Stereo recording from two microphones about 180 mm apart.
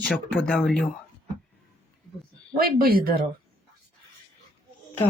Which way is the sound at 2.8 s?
55° right (ahead or behind).